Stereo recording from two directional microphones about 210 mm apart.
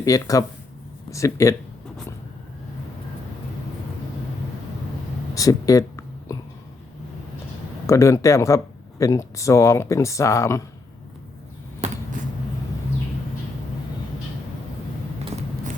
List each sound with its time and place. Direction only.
0.0 s speech: 15° left (ahead or behind)
5.3 s a sound: 15° left (ahead or behind)
7.9 s speech: 15° left (ahead or behind)